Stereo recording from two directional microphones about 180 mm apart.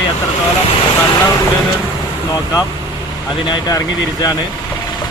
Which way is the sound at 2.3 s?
20° left (ahead or behind).